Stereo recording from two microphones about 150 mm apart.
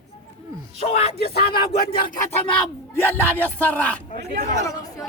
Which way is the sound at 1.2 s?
90° left.